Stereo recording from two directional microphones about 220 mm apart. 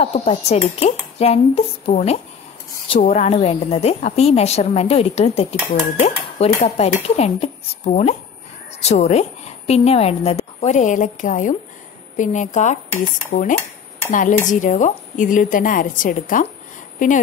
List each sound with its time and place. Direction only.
0.0 s a woman's voice: 30° left (ahead or behind)